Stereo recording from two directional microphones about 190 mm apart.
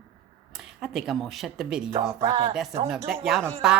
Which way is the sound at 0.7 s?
Centre (ahead or behind).